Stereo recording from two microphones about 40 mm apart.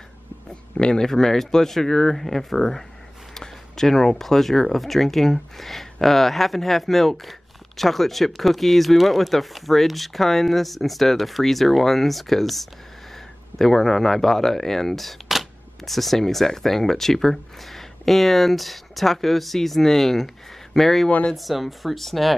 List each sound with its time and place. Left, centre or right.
0.7 s speech: left
1.0 s speech: centre